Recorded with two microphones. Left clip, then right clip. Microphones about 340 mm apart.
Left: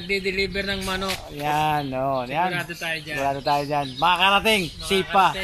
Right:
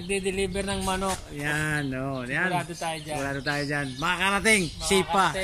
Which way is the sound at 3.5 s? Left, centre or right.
Centre.